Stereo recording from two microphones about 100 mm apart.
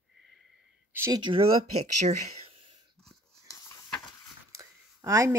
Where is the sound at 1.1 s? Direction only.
50° right (ahead or behind).